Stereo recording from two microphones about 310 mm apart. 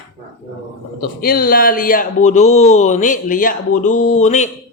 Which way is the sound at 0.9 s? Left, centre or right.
Left.